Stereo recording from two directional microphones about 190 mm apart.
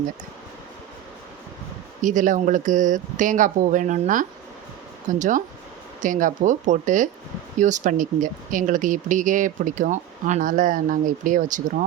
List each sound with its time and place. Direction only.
2.0 s speech: 45° right (ahead or behind)